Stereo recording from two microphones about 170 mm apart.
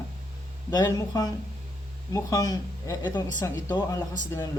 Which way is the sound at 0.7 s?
20° left (ahead or behind).